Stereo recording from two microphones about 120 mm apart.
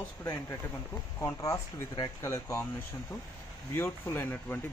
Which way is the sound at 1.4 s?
30° left (ahead or behind).